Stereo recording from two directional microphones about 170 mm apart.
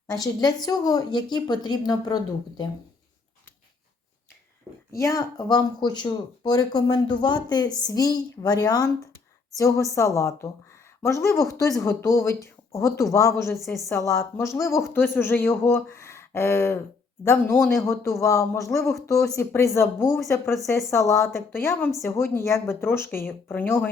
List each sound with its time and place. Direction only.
0.1 s speech: 25° left (ahead or behind)
4.9 s speech: 20° left (ahead or behind)